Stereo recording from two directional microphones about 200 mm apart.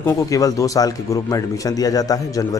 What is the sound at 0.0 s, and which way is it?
Speech, 15° left (ahead or behind).